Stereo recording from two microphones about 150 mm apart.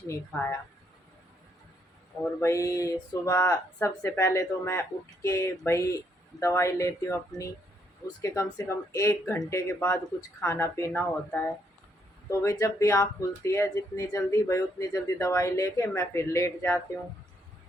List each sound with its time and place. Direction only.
0.1 s speech: 20° left (ahead or behind)
2.4 s speech: 20° left (ahead or behind)